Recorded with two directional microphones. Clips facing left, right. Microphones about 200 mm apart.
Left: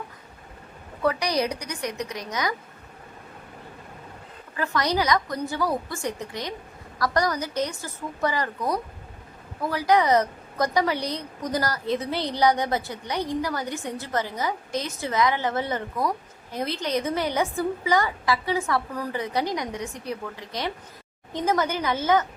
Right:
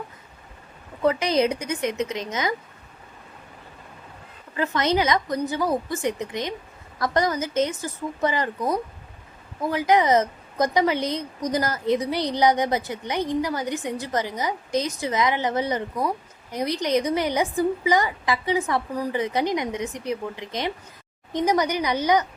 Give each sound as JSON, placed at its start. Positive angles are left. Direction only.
{"t": 1.0, "sound": "a woman's voice", "side_deg": -25}
{"t": 4.5, "sound": "a woman's voice", "side_deg": -20}